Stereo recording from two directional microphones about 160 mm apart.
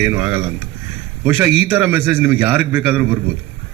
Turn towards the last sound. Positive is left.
turn(degrees=-10)  # may be behind; listen again after turning